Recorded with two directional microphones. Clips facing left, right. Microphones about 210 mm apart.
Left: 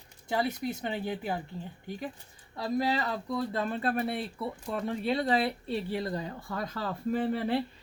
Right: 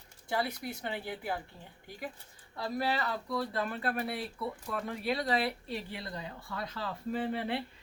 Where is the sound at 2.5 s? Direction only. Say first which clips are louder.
Left 4 dB; 20° left (ahead or behind); by 7.6 s 45° left (ahead or behind).